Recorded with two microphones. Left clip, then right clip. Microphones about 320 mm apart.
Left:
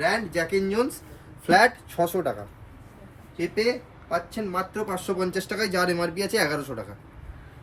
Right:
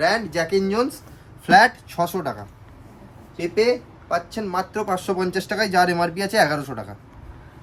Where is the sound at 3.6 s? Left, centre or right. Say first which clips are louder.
Right 7 dB; centre.